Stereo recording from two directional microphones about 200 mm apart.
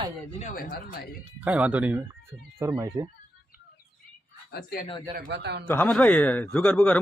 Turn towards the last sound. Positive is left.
turn(degrees=5)  # may be behind; listen again after turning